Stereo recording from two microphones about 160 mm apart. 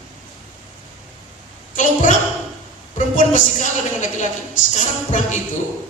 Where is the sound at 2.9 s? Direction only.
50° left (ahead or behind).